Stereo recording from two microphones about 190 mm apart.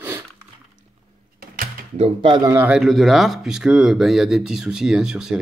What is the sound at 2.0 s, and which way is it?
Speech, 30° right (ahead or behind).